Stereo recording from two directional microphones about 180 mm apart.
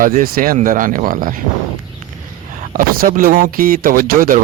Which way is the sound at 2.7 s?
50° right (ahead or behind).